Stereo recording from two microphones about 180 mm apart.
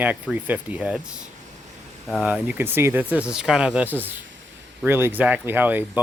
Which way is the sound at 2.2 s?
10° right (ahead or behind).